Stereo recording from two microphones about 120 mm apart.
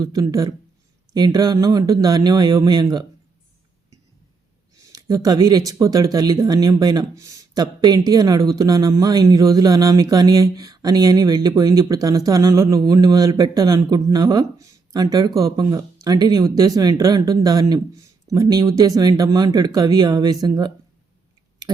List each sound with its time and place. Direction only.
0.0 s speech: 30° right (ahead or behind)
4.9 s speech: 30° right (ahead or behind)